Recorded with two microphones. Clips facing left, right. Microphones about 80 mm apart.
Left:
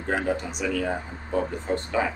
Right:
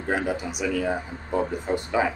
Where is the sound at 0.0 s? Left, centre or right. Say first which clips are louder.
Even; centre.